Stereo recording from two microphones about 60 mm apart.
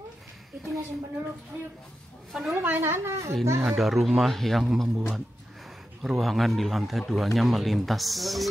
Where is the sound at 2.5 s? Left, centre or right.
Right.